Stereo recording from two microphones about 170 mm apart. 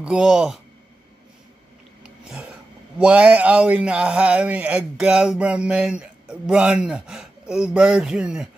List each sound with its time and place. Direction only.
0.0 s a man's voice: 5° right (ahead or behind)
2.0 s a sound: 5° right (ahead or behind)
3.0 s a man's voice: 10° right (ahead or behind)